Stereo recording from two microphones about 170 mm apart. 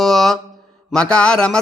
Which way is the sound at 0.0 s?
Centre (ahead or behind).